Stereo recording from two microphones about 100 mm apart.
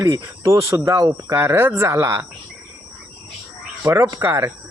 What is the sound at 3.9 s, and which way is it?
Speech, 45° right (ahead or behind).